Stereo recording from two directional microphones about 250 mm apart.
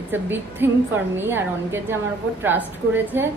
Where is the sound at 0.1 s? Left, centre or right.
Centre.